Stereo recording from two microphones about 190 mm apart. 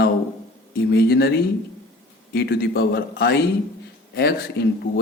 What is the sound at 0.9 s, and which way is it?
Speech, 55° left (ahead or behind).